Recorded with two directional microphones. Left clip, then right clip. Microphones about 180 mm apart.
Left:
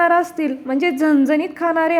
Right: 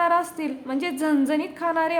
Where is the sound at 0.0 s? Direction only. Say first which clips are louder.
Left 6 dB; 30° left (ahead or behind).